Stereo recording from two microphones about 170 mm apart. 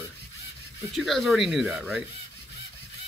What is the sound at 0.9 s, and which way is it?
Speech, centre (ahead or behind).